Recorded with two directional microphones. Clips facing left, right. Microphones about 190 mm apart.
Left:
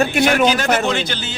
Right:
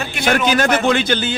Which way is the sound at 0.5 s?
55° right (ahead or behind).